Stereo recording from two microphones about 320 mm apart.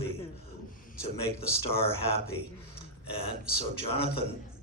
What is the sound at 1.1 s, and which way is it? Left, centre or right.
Speech, left.